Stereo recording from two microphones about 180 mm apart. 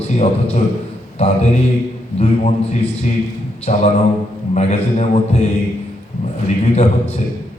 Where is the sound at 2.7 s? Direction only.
40° left (ahead or behind).